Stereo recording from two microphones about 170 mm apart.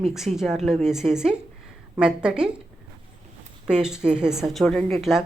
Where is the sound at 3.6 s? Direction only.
5° right (ahead or behind).